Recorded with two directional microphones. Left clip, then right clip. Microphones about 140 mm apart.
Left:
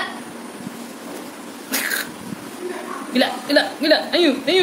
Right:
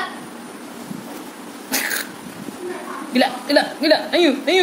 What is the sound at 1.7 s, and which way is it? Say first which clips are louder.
Cat: even; 20° right (ahead or behind).